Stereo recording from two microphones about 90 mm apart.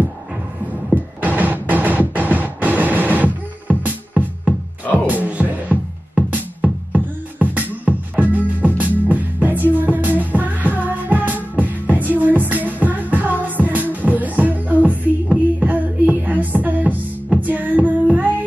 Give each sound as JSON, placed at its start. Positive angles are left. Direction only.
{"t": 1.2, "sound": "music", "side_deg": -20}